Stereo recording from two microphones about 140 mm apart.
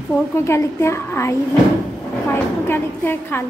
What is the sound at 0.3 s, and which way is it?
A woman's voice, 20° left (ahead or behind).